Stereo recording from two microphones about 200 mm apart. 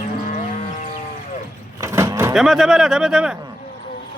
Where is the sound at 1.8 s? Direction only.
15° right (ahead or behind).